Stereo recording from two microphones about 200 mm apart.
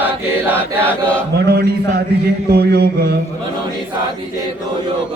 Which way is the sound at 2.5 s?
55° right (ahead or behind).